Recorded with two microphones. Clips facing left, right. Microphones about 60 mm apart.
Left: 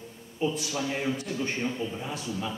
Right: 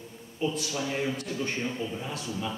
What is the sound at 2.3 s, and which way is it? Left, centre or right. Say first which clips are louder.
Speech: even; centre.